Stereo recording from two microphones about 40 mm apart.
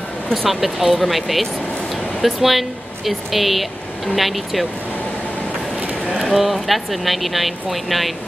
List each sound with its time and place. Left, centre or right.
0.3 s speech: centre
6.1 s speech: centre